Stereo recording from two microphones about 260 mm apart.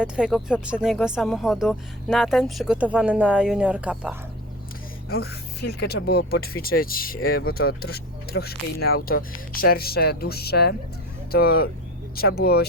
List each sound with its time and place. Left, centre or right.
0.0 s speech: centre
5.0 s speech: left